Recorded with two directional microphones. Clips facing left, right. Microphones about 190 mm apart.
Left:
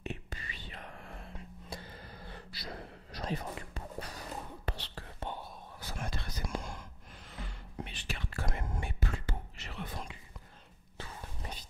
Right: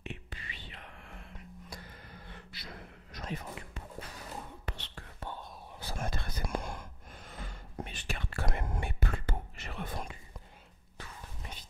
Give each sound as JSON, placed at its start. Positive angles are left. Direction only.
{"t": 0.0, "sound": "whispering", "side_deg": 40}
{"t": 5.9, "sound": "whispering", "side_deg": -50}
{"t": 11.0, "sound": "whispering", "side_deg": 35}